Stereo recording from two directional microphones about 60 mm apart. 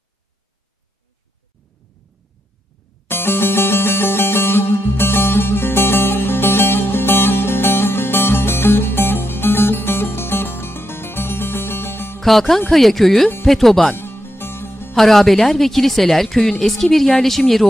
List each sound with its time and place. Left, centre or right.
3.1 s music: left
12.2 s a woman's voice: centre
13.9 s music: left
15.0 s a woman's voice: centre